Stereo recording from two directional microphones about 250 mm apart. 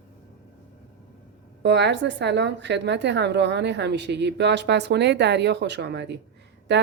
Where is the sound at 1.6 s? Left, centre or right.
Right.